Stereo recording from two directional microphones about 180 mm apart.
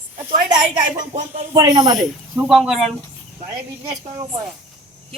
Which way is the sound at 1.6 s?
25° right (ahead or behind).